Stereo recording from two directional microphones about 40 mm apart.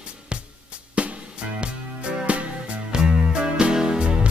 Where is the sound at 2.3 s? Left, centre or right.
Right; by 4.0 s centre.